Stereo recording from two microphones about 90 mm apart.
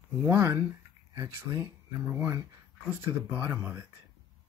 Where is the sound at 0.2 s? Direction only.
25° right (ahead or behind).